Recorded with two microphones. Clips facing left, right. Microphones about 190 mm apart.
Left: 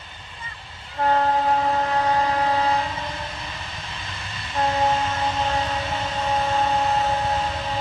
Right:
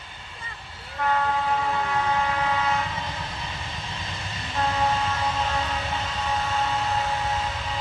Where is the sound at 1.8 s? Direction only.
40° left (ahead or behind).